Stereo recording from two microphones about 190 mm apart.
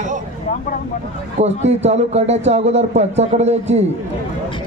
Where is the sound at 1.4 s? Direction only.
35° right (ahead or behind).